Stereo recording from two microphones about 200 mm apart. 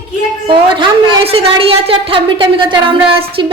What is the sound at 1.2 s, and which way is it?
A woman's voice, 30° right (ahead or behind).